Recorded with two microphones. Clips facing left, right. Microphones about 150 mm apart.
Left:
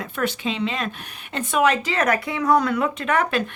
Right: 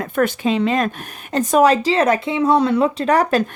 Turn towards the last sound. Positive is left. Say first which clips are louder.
# right 6 dB
turn(degrees=-35)  # may be behind; listen again after turning